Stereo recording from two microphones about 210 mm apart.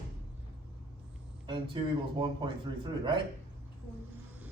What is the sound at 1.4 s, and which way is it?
Speech, 25° right (ahead or behind).